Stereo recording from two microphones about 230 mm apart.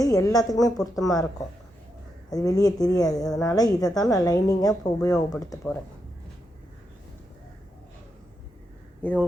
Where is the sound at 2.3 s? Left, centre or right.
Centre.